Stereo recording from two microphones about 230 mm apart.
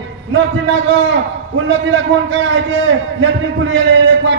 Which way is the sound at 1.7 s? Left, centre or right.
Right.